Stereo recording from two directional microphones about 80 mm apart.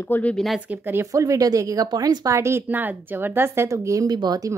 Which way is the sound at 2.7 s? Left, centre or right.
Right.